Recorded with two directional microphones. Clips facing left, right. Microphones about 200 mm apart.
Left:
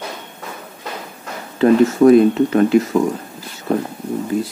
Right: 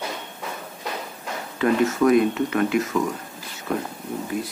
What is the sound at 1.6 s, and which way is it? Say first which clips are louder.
Speech: left 8 dB; 30° left (ahead or behind).